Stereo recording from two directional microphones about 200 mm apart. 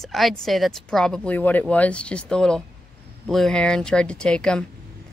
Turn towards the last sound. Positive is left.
turn(degrees=5)  # may be behind; listen again after turning